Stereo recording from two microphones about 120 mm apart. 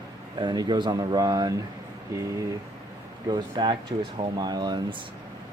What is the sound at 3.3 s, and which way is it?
Speech, 40° right (ahead or behind).